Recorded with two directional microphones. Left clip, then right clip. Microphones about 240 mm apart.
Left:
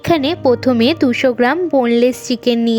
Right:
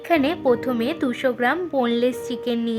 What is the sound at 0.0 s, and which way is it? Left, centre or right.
A woman's voice, left.